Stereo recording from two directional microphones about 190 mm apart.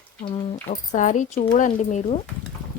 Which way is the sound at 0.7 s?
40° left (ahead or behind).